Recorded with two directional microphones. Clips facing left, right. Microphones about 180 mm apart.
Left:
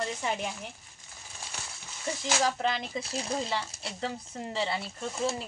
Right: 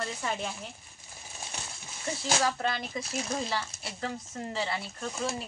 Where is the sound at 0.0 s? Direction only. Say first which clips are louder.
Left 2 dB; 15° left (ahead or behind).